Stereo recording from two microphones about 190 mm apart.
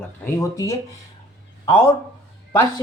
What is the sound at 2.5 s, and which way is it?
Speech, 15° left (ahead or behind).